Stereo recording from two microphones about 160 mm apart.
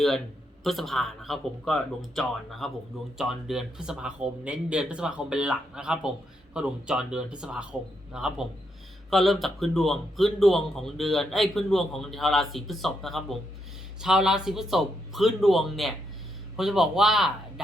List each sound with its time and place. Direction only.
0.6 s speech: centre (ahead or behind)